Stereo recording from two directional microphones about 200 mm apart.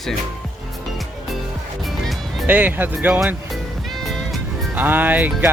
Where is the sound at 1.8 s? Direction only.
Centre (ahead or behind).